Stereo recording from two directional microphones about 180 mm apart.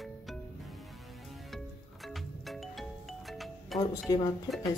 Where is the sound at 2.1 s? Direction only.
Centre (ahead or behind).